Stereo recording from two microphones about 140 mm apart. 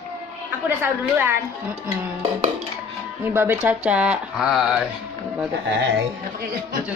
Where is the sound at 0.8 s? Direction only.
15° right (ahead or behind).